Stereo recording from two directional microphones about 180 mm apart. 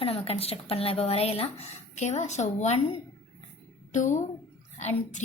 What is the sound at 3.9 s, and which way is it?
A woman's voice, 45° left (ahead or behind).